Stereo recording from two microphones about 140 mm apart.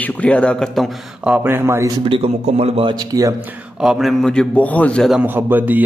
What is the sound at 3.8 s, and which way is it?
Speech, 5° right (ahead or behind).